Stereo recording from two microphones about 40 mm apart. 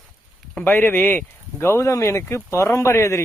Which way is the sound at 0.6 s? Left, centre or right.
Left.